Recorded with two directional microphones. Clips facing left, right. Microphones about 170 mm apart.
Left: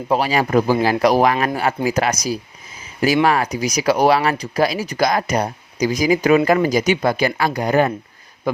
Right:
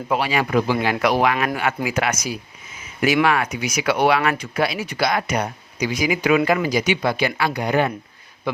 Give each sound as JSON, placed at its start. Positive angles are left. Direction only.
{"t": 0.1, "sound": "speech", "side_deg": 40}